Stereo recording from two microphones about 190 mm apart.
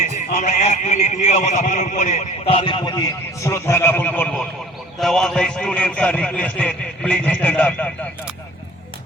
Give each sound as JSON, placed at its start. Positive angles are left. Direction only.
{"t": 0.3, "sound": "a man's voice", "side_deg": 40}